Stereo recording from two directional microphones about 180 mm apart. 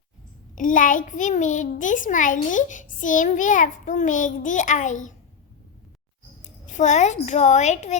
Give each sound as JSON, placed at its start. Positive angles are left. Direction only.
{"t": 0.5, "sound": "a child's voice", "side_deg": 45}
{"t": 6.4, "sound": "a child's voice", "side_deg": 40}